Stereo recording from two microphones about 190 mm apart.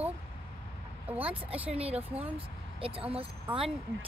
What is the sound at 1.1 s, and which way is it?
A child's voice, 30° right (ahead or behind).